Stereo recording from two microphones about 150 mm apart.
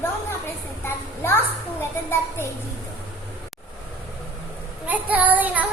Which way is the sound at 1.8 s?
15° left (ahead or behind).